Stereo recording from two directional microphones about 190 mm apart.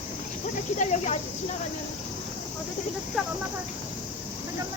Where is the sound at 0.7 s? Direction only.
40° left (ahead or behind).